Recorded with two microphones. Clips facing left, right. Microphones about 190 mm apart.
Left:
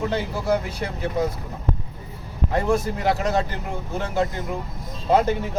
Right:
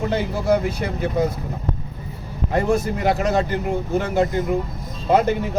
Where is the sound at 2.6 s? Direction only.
15° right (ahead or behind).